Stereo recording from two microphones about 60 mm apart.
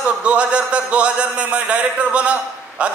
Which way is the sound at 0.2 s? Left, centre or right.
Centre.